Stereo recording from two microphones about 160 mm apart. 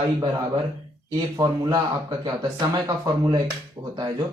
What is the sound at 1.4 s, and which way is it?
Speech, 25° right (ahead or behind).